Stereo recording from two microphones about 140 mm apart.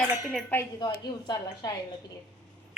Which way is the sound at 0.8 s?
30° left (ahead or behind).